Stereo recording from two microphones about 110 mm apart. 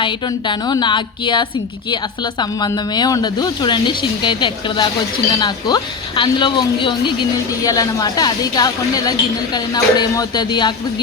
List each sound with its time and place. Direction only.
0.0 s a woman's voice: 45° left (ahead or behind)
7.6 s a woman's voice: 35° left (ahead or behind)